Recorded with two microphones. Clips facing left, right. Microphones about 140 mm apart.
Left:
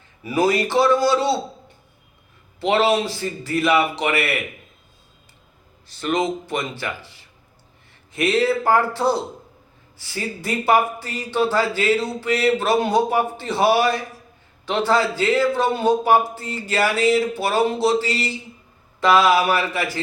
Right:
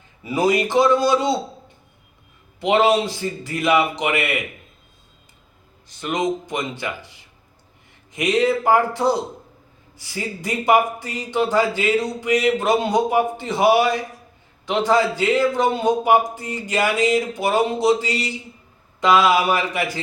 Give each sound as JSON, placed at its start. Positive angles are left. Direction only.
{"t": 0.2, "sound": "a man's voice", "side_deg": -20}
{"t": 2.6, "sound": "a man's voice", "side_deg": -20}
{"t": 5.9, "sound": "a man's voice", "side_deg": -15}
{"t": 8.1, "sound": "a man's voice", "side_deg": -15}